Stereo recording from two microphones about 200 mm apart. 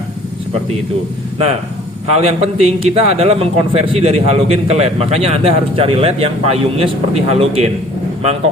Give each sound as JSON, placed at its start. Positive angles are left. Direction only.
{"t": 2.1, "sound": "a man's voice", "side_deg": -30}